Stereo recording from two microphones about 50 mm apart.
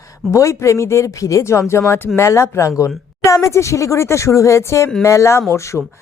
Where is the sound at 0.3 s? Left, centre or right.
Left.